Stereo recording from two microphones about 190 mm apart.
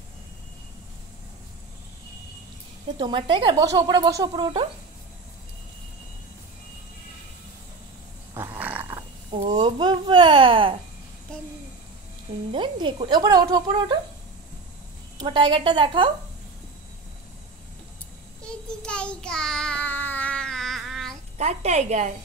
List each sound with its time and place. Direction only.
3.0 s speech: 25° right (ahead or behind)
8.4 s roar: 10° right (ahead or behind)
9.5 s babbling: 20° right (ahead or behind)
12.4 s speech: 25° right (ahead or behind)
15.1 s speech: 25° right (ahead or behind)
18.8 s child singing: 5° left (ahead or behind)
21.4 s a woman's voice: 35° right (ahead or behind)